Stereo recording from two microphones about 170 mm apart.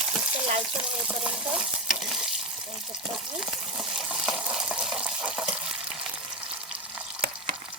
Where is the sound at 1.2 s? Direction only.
5° right (ahead or behind).